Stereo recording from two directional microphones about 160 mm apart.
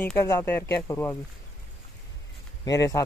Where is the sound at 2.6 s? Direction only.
20° left (ahead or behind).